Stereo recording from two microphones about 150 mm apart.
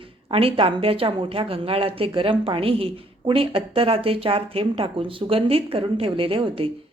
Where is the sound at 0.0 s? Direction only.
40° right (ahead or behind).